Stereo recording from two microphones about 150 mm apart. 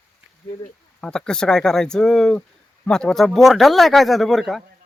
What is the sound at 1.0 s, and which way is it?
Speech, 5° left (ahead or behind).